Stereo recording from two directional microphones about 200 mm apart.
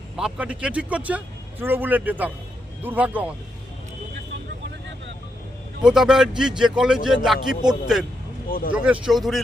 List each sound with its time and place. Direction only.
0.2 s speech: 5° right (ahead or behind)
5.8 s a man's voice: 5° right (ahead or behind)
8.4 s speech: 45° left (ahead or behind)
8.7 s a man's voice: 5° right (ahead or behind)